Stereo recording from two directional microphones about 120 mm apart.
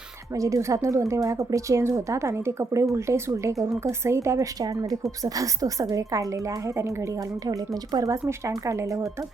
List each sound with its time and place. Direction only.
0.3 s a woman's voice: 25° right (ahead or behind)
7.9 s a woman's voice: 25° right (ahead or behind)